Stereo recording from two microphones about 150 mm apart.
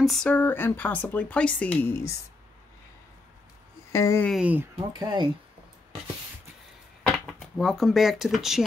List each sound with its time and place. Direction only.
0.0 s speech: 5° left (ahead or behind)
3.9 s speech: 20° left (ahead or behind)
4.4 s speech: 10° right (ahead or behind)
4.9 s speech: 30° right (ahead or behind)
7.0 s a sound: centre (ahead or behind)
7.5 s speech: centre (ahead or behind)